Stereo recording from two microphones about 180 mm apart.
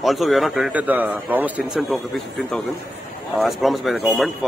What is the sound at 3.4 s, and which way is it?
Speech, centre (ahead or behind).